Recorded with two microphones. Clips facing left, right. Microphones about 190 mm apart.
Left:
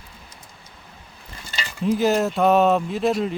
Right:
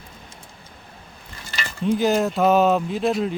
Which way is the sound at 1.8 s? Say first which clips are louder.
Even; 5° left (ahead or behind).